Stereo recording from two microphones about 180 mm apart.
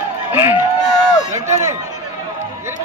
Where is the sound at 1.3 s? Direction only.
15° right (ahead or behind).